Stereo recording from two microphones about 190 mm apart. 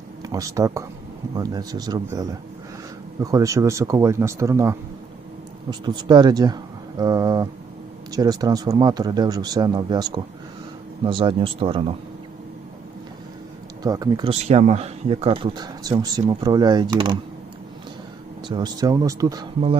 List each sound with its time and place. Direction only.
0.2 s speech: 20° right (ahead or behind)
5.8 s speech: 20° right (ahead or behind)
13.8 s speech: 20° right (ahead or behind)
14.3 s speech: 35° right (ahead or behind)
18.4 s speech: 20° right (ahead or behind)